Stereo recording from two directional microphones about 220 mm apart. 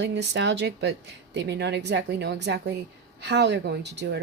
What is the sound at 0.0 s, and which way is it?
Speech, 50° right (ahead or behind).